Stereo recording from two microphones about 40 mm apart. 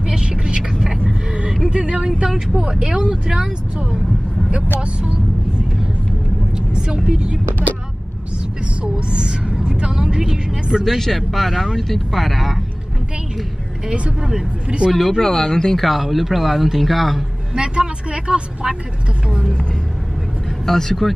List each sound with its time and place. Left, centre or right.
0.0 s vehicle: centre
1.7 s speech: right
7.1 s speech: right
8.8 s a sound: right
10.2 s vehicle: centre
11.0 s speech: centre
13.8 s speech: right
14.9 s speech: centre
15.8 s speech: centre
17.6 s speech: right
20.6 s speech: centre